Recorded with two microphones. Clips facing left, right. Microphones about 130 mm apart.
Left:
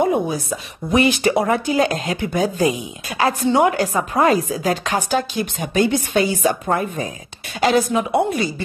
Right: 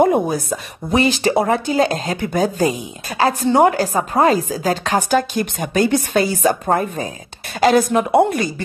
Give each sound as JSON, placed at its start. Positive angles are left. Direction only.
{"t": 0.0, "sound": "chopping", "side_deg": -50}
{"t": 0.9, "sound": "speech", "side_deg": -35}
{"t": 7.6, "sound": "speech", "side_deg": -50}